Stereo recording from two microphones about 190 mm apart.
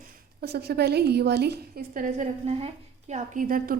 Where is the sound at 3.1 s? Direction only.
45° right (ahead or behind).